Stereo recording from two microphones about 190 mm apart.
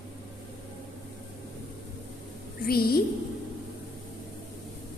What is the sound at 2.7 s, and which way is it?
Speech, 50° left (ahead or behind).